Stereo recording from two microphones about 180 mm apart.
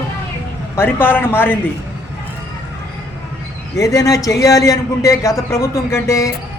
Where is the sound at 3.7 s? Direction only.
20° left (ahead or behind).